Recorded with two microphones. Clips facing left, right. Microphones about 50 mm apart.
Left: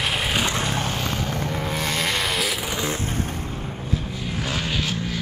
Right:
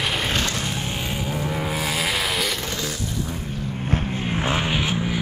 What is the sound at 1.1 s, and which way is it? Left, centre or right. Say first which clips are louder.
Vehicle: even; centre.